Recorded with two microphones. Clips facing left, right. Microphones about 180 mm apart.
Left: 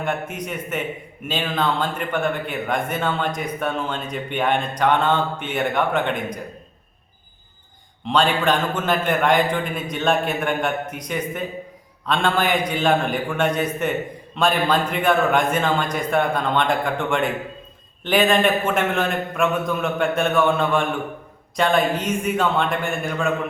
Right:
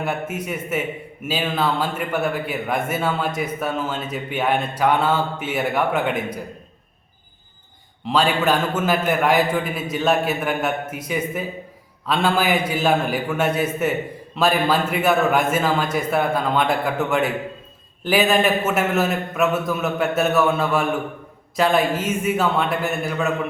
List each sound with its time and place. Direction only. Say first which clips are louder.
0.0 s a man's voice: right 1 dB; 5° right (ahead or behind)
8.0 s a man's voice: even; 5° right (ahead or behind)